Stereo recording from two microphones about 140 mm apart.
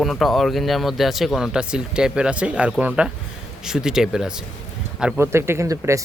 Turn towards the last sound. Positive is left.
turn(degrees=-20)  # may be behind; listen again after turning